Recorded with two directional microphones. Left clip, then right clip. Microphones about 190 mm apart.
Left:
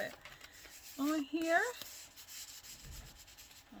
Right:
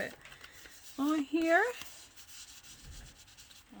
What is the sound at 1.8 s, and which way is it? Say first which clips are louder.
Rub: right 1 dB; 20° right (ahead or behind).